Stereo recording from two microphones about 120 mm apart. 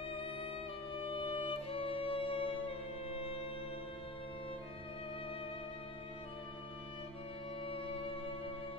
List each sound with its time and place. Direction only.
0.9 s music: 50° left (ahead or behind)